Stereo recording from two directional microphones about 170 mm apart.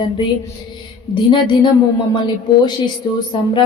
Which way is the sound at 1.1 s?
30° left (ahead or behind).